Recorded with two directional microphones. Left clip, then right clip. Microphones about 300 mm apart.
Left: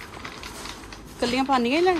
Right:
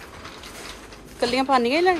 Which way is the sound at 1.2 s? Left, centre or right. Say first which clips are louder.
Right 3 dB; centre.